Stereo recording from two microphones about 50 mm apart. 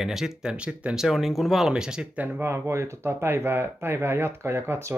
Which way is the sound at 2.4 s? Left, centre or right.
Right.